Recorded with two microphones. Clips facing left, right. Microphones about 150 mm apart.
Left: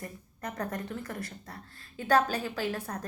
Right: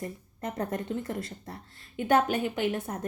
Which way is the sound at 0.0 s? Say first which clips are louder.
Right 4 dB; 25° right (ahead or behind).